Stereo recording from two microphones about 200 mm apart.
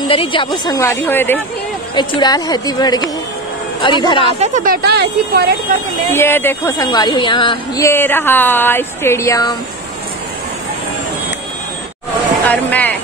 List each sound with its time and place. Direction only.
0.1 s speech: 25° left (ahead or behind); by 1.4 s 10° left (ahead or behind)
2.0 s a woman's voice: 20° left (ahead or behind)
4.3 s speech: 35° right (ahead or behind); by 5.5 s 55° right (ahead or behind)
6.1 s speech: 10° left (ahead or behind)
12.4 s speech: 10° left (ahead or behind)